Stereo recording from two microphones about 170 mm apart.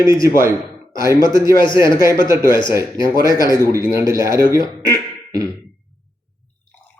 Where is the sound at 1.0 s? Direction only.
20° right (ahead or behind).